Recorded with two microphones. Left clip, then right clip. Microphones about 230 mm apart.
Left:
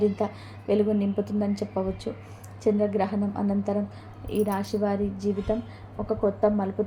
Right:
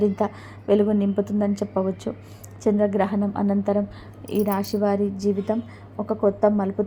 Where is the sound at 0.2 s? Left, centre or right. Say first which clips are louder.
Right 4 dB; right.